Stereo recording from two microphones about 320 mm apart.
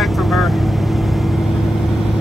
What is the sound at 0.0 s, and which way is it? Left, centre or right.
Vehicle, centre.